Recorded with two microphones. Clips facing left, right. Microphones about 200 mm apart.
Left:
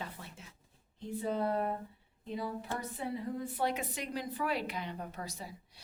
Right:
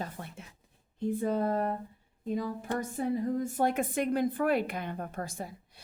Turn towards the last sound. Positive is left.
turn(degrees=-50)  # may be behind; listen again after turning